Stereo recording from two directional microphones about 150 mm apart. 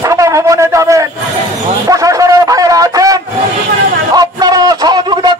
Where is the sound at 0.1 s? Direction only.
20° right (ahead or behind).